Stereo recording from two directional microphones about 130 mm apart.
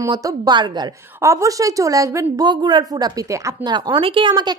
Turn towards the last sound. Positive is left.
turn(degrees=-35)  # may be behind; listen again after turning